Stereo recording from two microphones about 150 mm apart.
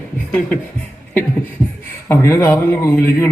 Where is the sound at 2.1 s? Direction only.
15° left (ahead or behind).